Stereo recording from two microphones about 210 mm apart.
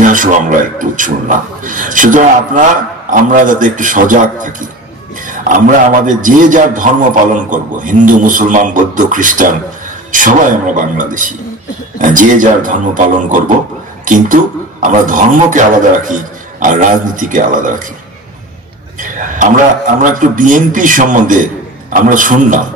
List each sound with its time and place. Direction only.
0.0 s a man's voice: 40° right (ahead or behind)
5.3 s a sound: 35° right (ahead or behind)
6.0 s a man's voice: 40° right (ahead or behind)
18.9 s a man's voice: 40° right (ahead or behind)